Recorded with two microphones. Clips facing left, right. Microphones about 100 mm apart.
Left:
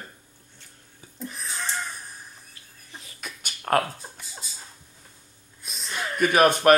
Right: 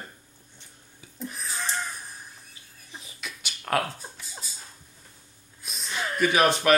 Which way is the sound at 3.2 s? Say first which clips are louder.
Left 3 dB; 45° left (ahead or behind).